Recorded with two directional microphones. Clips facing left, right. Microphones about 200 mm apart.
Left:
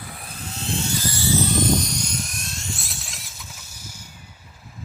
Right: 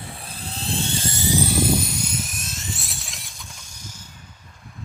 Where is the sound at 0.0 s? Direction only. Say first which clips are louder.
Right 1 dB; 30° right (ahead or behind); by 4.0 s 10° left (ahead or behind).